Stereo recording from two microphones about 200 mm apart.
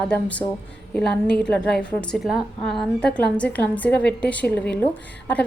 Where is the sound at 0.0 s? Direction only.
5° left (ahead or behind).